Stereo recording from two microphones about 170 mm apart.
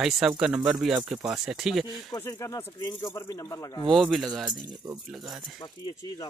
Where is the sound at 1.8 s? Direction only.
20° left (ahead or behind).